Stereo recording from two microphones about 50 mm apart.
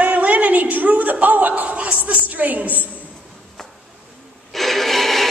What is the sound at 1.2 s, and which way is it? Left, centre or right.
Chuckle, right.